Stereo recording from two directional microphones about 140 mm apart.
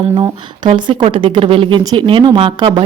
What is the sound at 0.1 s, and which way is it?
A woman's voice, 30° right (ahead or behind).